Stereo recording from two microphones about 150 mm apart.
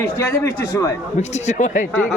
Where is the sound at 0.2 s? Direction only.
20° left (ahead or behind).